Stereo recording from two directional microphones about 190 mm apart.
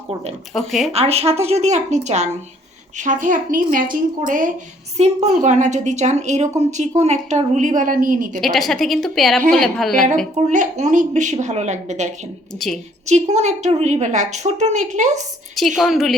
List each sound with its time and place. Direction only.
0.5 s a woman's voice: centre (ahead or behind)
0.9 s a woman's voice: 35° right (ahead or behind)
8.4 s a woman's voice: centre (ahead or behind)
10.3 s a woman's voice: 40° right (ahead or behind)
12.5 s a woman's voice: centre (ahead or behind)
13.1 s a woman's voice: 35° right (ahead or behind)
15.5 s a woman's voice: centre (ahead or behind)